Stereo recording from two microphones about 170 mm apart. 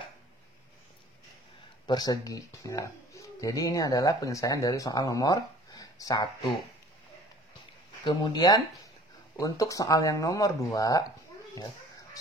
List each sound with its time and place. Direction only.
1.9 s speech: 25° left (ahead or behind)
8.0 s speech: 25° left (ahead or behind)